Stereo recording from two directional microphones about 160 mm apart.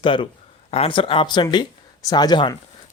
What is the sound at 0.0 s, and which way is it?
Speech, 30° left (ahead or behind).